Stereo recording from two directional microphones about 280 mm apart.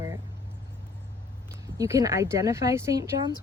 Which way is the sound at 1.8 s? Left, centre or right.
Centre.